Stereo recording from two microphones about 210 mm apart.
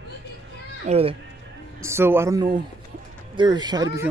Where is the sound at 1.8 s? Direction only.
10° right (ahead or behind).